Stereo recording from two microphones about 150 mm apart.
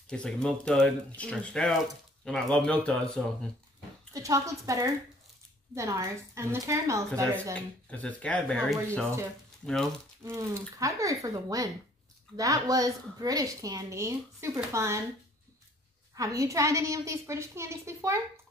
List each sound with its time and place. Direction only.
0.1 s speech: 5° left (ahead or behind)
4.1 s a woman's voice: 20° right (ahead or behind)
7.5 s speech: 10° left (ahead or behind)
10.2 s a woman's voice: 20° right (ahead or behind)
16.2 s a woman's voice: 20° right (ahead or behind)